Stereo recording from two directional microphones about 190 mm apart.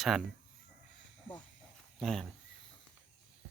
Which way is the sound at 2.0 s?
Centre (ahead or behind).